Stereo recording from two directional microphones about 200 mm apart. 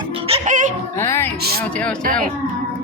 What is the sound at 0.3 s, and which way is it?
Music, 30° right (ahead or behind).